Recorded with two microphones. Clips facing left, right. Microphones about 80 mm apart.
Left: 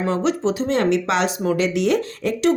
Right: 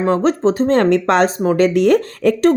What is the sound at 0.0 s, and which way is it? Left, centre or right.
Speech, right.